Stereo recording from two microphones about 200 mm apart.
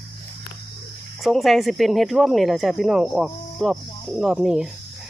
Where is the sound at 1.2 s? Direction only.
Centre (ahead or behind).